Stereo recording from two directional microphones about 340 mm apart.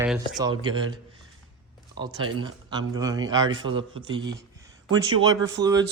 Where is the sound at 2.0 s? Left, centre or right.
Centre.